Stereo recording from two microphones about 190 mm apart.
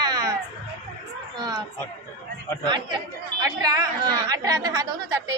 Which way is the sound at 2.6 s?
25° right (ahead or behind).